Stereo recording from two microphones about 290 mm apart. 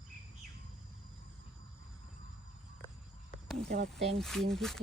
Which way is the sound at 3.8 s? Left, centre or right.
Right.